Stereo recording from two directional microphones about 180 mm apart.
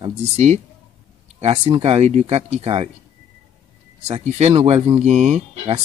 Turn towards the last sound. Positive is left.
turn(degrees=-40)  # may be behind; listen again after turning